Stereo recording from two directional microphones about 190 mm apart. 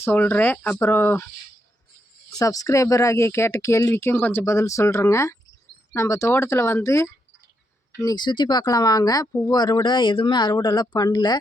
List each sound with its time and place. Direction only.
0.0 s speech: 10° left (ahead or behind)
2.4 s speech: 20° left (ahead or behind)